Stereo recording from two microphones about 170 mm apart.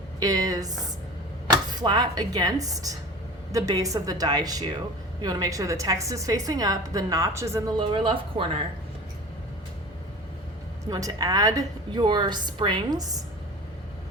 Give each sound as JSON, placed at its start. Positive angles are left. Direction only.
{"t": 0.2, "sound": "a woman's voice", "side_deg": -20}
{"t": 7.8, "sound": "speech", "side_deg": -30}
{"t": 10.8, "sound": "a woman's voice", "side_deg": -20}